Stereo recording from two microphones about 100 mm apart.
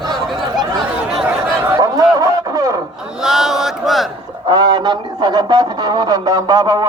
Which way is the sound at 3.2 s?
5° right (ahead or behind).